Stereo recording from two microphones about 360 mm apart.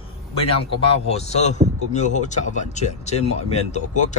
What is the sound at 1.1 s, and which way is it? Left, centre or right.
Speech, centre.